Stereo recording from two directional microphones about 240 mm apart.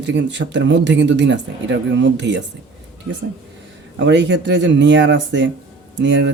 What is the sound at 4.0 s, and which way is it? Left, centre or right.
Speech, right.